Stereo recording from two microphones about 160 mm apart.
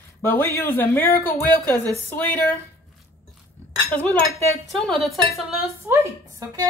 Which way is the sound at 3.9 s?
10° left (ahead or behind).